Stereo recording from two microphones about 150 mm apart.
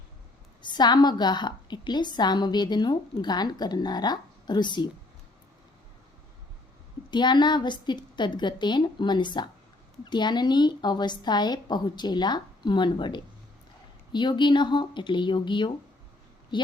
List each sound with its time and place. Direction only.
0.6 s a woman's voice: 30° left (ahead or behind)
7.1 s a woman's voice: 30° left (ahead or behind)